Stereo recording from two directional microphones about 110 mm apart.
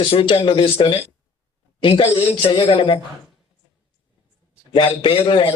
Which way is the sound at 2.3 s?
55° left (ahead or behind).